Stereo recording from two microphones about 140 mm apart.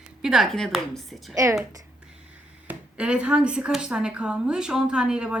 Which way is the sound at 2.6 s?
10° right (ahead or behind).